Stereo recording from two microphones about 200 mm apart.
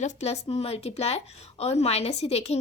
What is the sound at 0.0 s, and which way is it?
A woman's voice, 35° left (ahead or behind).